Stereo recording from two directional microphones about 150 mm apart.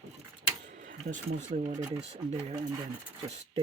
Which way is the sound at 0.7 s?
55° right (ahead or behind).